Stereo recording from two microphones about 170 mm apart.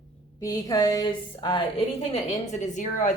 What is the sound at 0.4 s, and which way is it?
A woman's voice, 20° left (ahead or behind).